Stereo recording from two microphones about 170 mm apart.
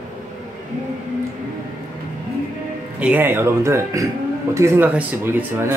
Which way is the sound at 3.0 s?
10° right (ahead or behind).